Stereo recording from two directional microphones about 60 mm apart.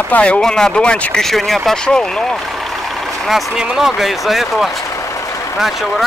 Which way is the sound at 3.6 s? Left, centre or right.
Centre.